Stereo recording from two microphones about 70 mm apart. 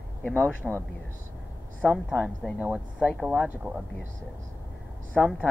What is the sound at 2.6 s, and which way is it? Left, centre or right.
Speech, centre.